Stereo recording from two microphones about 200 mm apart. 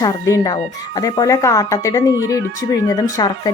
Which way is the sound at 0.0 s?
20° left (ahead or behind).